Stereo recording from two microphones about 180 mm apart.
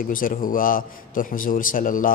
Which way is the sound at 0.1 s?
50° left (ahead or behind).